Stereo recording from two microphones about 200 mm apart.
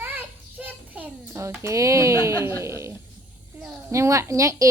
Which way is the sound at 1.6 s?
15° right (ahead or behind).